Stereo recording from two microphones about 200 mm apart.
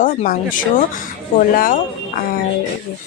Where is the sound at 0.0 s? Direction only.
40° left (ahead or behind).